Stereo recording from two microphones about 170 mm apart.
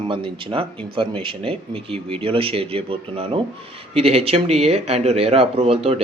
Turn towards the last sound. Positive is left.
turn(degrees=-35)  # may be behind; listen again after turning